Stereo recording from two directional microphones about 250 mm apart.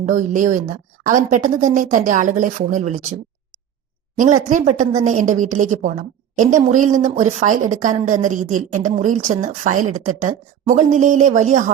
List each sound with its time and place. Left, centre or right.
0.0 s speech: right
4.2 s speech: right